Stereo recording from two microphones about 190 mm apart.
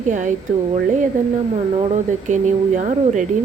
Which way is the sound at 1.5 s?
30° right (ahead or behind).